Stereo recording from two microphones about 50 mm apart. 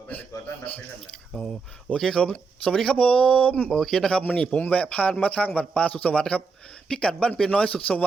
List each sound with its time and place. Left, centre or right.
0.1 s a man's voice: left
2.0 s a man's voice: centre
3.7 s speech: centre
4.7 s a man's voice: left
7.7 s a man's voice: left